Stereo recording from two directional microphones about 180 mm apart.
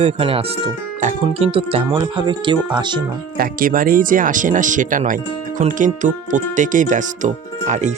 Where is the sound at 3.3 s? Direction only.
50° right (ahead or behind).